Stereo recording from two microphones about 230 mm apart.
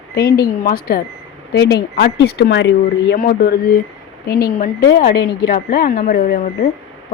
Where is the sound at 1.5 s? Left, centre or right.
Left.